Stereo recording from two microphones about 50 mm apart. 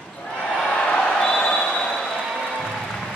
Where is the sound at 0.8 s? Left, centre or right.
Left.